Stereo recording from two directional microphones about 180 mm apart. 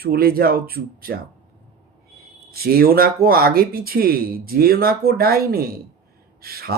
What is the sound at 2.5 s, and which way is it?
Speech, 55° right (ahead or behind).